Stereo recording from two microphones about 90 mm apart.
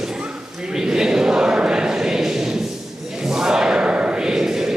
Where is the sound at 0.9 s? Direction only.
10° right (ahead or behind).